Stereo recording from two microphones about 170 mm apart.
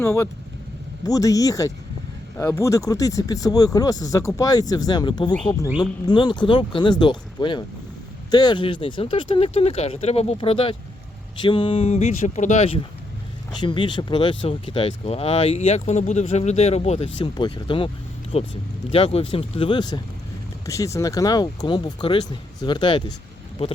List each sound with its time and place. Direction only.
0.0 s speech: 15° left (ahead or behind); by 12.8 s 40° left (ahead or behind)
13.6 s speech: 30° left (ahead or behind)